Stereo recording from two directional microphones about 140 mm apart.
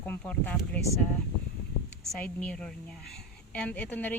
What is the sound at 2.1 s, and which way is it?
Speech, 10° left (ahead or behind).